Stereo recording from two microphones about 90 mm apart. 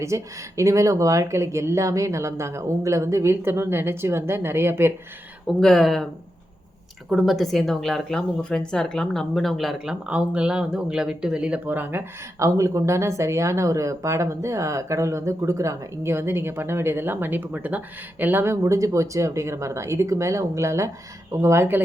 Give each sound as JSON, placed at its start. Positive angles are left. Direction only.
{"t": 0.0, "sound": "speech", "side_deg": -35}
{"t": 5.5, "sound": "speech", "side_deg": 5}
{"t": 7.1, "sound": "speech", "side_deg": 0}